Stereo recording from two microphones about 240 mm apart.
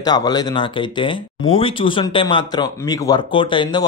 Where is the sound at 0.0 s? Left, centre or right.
Centre.